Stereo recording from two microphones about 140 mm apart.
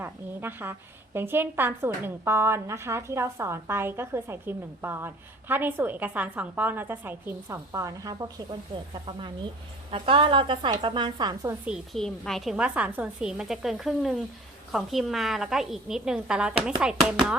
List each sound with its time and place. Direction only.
0.0 s a woman's voice: 15° right (ahead or behind)
9.0 s a woman's voice: 35° right (ahead or behind)
11.9 s a woman's voice: 5° left (ahead or behind)